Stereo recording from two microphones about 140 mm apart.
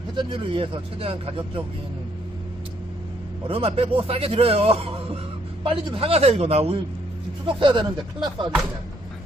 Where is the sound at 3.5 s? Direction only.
45° right (ahead or behind).